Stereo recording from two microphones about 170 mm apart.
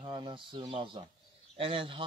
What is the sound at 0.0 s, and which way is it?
Speech, 30° right (ahead or behind).